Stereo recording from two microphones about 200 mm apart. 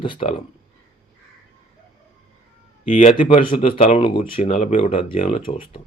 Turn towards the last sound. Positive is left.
turn(degrees=25)  # may be behind; listen again after turning